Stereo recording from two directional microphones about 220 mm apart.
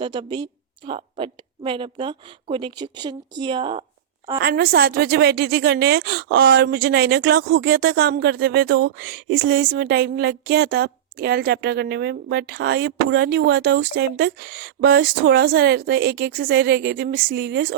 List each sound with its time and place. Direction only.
0.0 s speech: 20° right (ahead or behind)
4.4 s speech: 45° right (ahead or behind)